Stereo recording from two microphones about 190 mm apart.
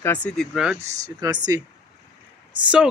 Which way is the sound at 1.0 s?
20° right (ahead or behind).